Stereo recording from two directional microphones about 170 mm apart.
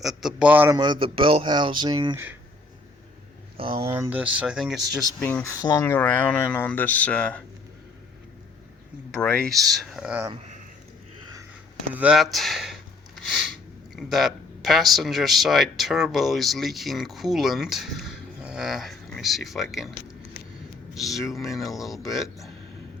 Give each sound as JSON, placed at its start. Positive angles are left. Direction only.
{"t": 0.0, "sound": "speech", "side_deg": 0}
{"t": 0.8, "sound": "speech", "side_deg": -30}
{"t": 3.8, "sound": "speech", "side_deg": -15}
{"t": 5.2, "sound": "speech", "side_deg": 15}
{"t": 9.1, "sound": "speech", "side_deg": 10}
{"t": 11.9, "sound": "speech", "side_deg": -5}
{"t": 13.9, "sound": "speech", "side_deg": 0}